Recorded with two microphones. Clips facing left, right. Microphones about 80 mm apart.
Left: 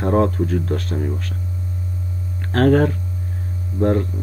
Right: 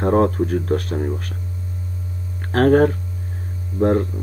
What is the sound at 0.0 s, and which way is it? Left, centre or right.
Speech, right.